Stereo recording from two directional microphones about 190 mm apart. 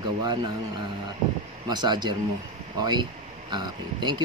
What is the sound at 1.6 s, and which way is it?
Speech, 20° right (ahead or behind).